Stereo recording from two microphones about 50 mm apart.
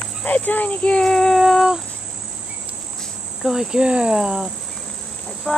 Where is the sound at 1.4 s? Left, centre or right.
Centre.